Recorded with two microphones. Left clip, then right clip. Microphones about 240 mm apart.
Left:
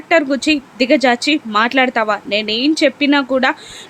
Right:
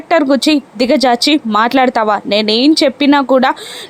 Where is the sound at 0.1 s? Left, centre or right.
Centre.